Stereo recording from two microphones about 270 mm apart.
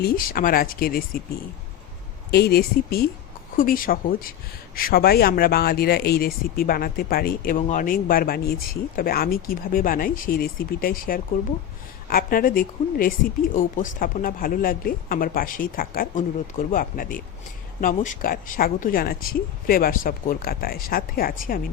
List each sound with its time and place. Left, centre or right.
0.0 s speech: left
2.3 s speech: left